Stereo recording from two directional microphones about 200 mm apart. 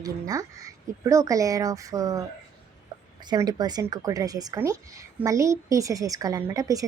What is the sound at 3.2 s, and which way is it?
A woman's voice, 20° right (ahead or behind).